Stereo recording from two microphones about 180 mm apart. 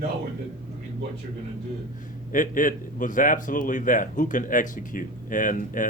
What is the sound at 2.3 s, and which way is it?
Speech, 50° left (ahead or behind).